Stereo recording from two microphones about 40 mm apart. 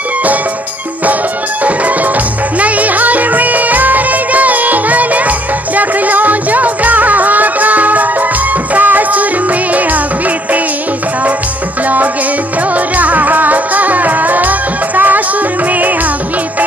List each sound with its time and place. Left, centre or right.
2.6 s music: right
12.7 s music: right